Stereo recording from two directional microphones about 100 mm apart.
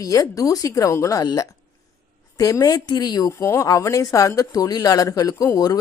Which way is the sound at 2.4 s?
35° left (ahead or behind).